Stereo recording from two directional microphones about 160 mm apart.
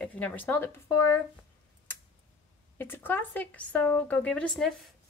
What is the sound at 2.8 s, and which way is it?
A woman's voice, 10° left (ahead or behind).